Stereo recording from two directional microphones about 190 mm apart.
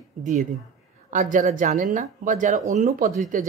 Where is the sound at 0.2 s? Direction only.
40° right (ahead or behind).